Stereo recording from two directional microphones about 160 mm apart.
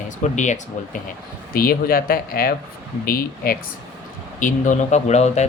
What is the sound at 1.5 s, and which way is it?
Speech, 65° left (ahead or behind).